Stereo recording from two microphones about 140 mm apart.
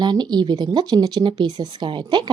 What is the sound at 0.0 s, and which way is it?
A woman's voice, 30° right (ahead or behind).